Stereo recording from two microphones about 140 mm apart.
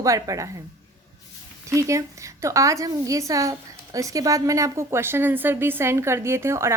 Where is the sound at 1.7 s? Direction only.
20° right (ahead or behind).